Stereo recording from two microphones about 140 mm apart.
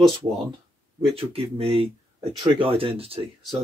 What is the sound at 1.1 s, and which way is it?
Speech, 45° right (ahead or behind).